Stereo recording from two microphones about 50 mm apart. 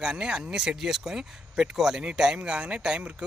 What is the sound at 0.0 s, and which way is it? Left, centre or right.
Speech, centre.